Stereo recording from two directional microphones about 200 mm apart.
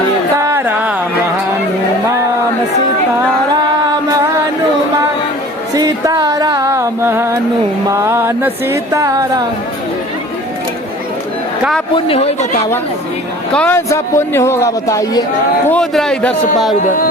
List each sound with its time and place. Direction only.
0.4 s a sound: 10° right (ahead or behind)
5.7 s music: 20° right (ahead or behind)
11.9 s a man's voice: 30° left (ahead or behind)
13.5 s a man's voice: 10° left (ahead or behind)
15.6 s a man's voice: 5° left (ahead or behind)
16.8 s music: 45° left (ahead or behind)